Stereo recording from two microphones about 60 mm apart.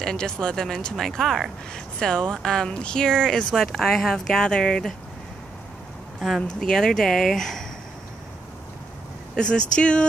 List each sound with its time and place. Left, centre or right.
0.0 s speech: centre
6.4 s speech: centre
9.3 s speech: centre